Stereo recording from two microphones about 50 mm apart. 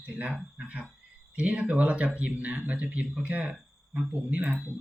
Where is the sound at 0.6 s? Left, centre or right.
Right.